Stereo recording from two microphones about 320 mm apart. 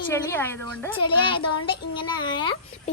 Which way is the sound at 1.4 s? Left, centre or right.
Left.